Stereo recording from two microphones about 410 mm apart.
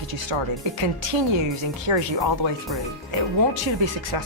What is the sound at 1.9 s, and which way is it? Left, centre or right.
Speech, right.